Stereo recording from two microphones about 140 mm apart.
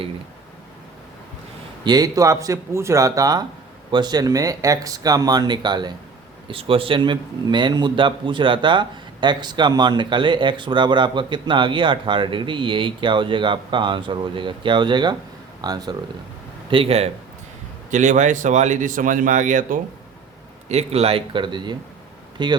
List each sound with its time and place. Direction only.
1.8 s a man's voice: 30° right (ahead or behind)
16.6 s a man's voice: 40° right (ahead or behind)
17.9 s speech: 60° right (ahead or behind)
20.7 s a man's voice: 50° right (ahead or behind)